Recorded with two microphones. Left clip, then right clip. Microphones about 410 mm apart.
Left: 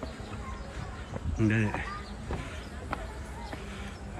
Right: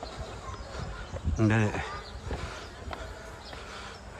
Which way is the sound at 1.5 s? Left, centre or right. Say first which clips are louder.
Right 2 dB; right.